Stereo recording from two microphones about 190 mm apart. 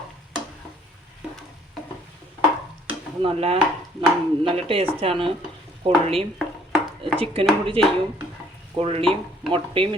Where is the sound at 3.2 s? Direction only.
30° right (ahead or behind).